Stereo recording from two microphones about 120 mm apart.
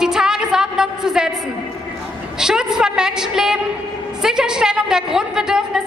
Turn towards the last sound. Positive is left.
turn(degrees=-5)  # may be behind; listen again after turning